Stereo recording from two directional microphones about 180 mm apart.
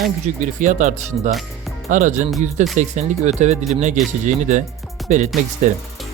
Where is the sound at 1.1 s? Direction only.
35° right (ahead or behind).